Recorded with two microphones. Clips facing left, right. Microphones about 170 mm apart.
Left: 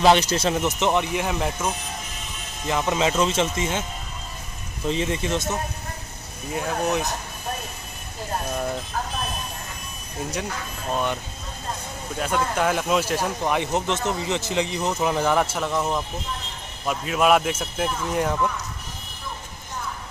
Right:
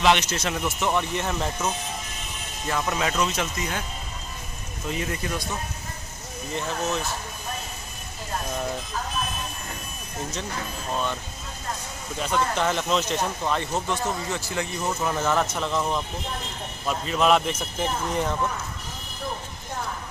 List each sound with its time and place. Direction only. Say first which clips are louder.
0.0 s speech: left 4 dB; 35° left (ahead or behind)
0.7 s speech: left 3 dB; 20° left (ahead or behind)
2.7 s speech: left 4 dB; 20° left (ahead or behind)
4.8 s speech: left 5 dB; 25° left (ahead or behind)
12.2 s speech: left 1 dB; 5° left (ahead or behind)